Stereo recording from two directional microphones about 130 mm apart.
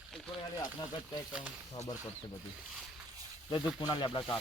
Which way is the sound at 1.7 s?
30° left (ahead or behind).